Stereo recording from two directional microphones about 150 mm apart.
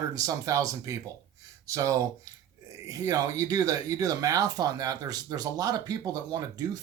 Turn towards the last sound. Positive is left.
turn(degrees=-25)  # may be behind; listen again after turning